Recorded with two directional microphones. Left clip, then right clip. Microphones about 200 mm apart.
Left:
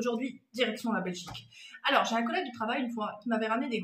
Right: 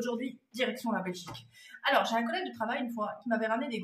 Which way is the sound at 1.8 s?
15° right (ahead or behind).